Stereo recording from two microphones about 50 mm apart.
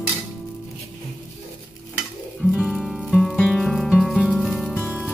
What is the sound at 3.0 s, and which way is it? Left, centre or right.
Music, centre.